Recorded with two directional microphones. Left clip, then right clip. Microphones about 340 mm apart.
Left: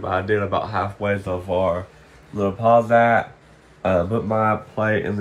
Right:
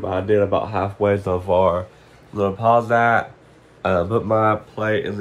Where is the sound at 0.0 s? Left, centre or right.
Centre.